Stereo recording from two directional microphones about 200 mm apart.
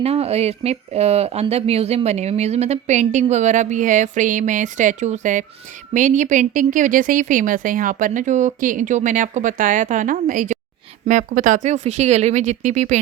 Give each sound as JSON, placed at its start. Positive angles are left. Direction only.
{"t": 0.0, "sound": "speech", "side_deg": -30}